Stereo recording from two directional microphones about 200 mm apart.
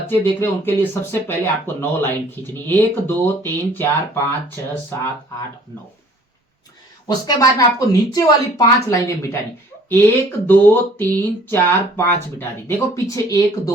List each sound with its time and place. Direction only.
0.1 s speech: 10° left (ahead or behind)
7.1 s speech: 20° left (ahead or behind)
10.4 s speech: 10° left (ahead or behind)